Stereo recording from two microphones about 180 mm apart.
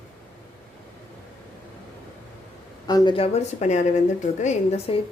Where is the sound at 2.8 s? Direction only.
25° left (ahead or behind).